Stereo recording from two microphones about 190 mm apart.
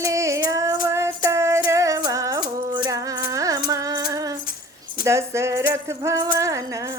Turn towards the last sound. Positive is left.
turn(degrees=-15)  # may be behind; listen again after turning